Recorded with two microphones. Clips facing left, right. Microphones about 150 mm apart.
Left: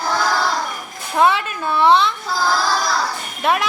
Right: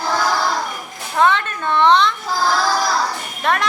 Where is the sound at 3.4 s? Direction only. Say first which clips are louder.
Left 1 dB; 5° left (ahead or behind).